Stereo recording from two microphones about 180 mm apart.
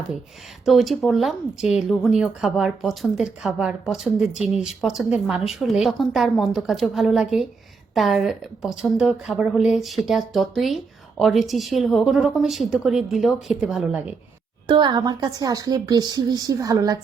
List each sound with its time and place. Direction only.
0.6 s speech: centre (ahead or behind)
14.7 s a woman's voice: 25° right (ahead or behind)